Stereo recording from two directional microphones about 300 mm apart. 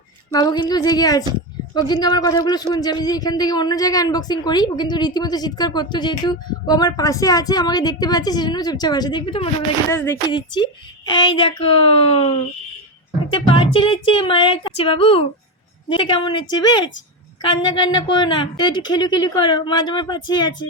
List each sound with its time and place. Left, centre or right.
0.3 s a woman's voice: centre